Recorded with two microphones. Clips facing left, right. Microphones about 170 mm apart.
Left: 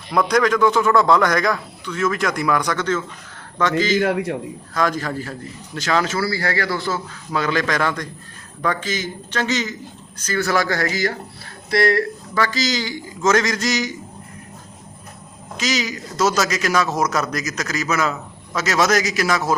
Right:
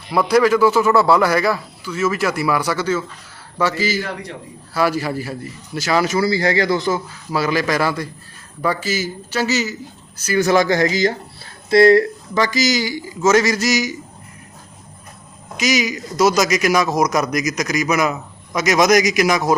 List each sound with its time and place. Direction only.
0.1 s a man's voice: 5° right (ahead or behind)
4.0 s a man's voice: 60° left (ahead or behind)
4.7 s a man's voice: 10° right (ahead or behind)
15.5 s a man's voice: 10° right (ahead or behind)